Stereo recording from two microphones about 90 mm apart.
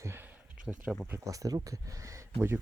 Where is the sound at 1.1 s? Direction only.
40° right (ahead or behind).